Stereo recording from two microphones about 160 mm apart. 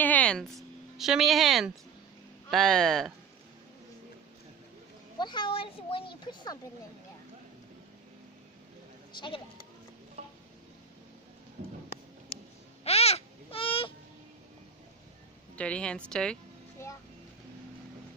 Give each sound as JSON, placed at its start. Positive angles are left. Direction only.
{"t": 0.0, "sound": "a woman's voice", "side_deg": 10}
{"t": 5.2, "sound": "a woman's voice", "side_deg": 30}
{"t": 9.1, "sound": "speech", "side_deg": 30}
{"t": 10.2, "sound": "a sound", "side_deg": -40}
{"t": 12.8, "sound": "babbling", "side_deg": 40}
{"t": 15.5, "sound": "a woman's voice", "side_deg": 5}
{"t": 16.8, "sound": "music", "side_deg": 15}